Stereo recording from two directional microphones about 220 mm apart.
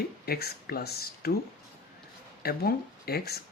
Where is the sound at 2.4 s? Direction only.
45° left (ahead or behind).